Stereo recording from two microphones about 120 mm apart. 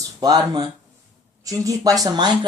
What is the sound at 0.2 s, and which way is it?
Speech, 30° right (ahead or behind).